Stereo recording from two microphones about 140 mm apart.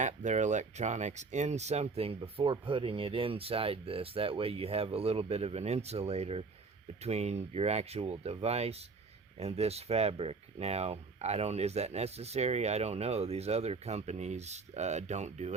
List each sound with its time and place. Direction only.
0.0 s speech: 55° right (ahead or behind)